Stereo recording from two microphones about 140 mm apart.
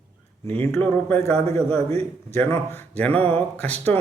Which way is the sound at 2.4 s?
15° left (ahead or behind).